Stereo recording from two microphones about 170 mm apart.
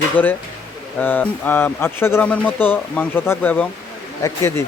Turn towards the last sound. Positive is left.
turn(degrees=15)  # may be behind; listen again after turning